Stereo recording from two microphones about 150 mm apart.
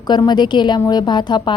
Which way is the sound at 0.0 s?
25° left (ahead or behind).